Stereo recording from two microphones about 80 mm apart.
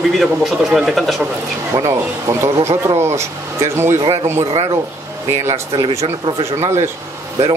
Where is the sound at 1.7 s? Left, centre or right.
Right.